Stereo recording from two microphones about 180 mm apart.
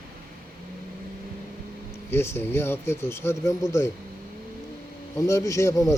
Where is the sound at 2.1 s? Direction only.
15° left (ahead or behind).